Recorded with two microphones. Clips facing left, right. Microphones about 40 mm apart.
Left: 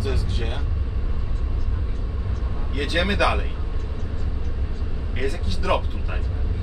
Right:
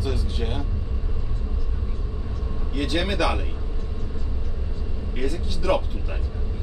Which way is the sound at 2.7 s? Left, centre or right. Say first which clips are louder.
Left 2 dB; centre.